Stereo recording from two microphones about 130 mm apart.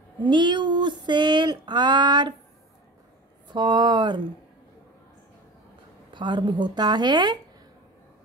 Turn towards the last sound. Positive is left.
turn(degrees=-35)  # may be behind; listen again after turning